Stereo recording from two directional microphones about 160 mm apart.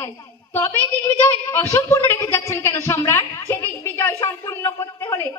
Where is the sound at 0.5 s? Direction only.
15° left (ahead or behind).